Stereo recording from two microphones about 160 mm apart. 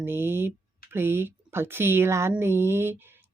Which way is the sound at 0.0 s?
15° right (ahead or behind).